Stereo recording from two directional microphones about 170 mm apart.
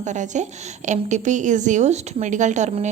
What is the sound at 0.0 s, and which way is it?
A woman's voice, 45° right (ahead or behind).